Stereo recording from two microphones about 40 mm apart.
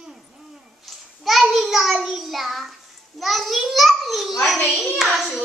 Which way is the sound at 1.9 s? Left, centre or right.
Centre.